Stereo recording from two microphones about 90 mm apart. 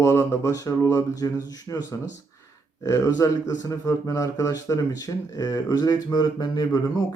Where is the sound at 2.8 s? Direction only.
40° left (ahead or behind).